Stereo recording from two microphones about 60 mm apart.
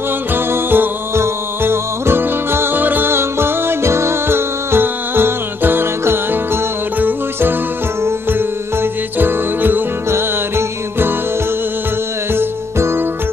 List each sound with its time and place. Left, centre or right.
0.3 s music: right
12.4 s music: right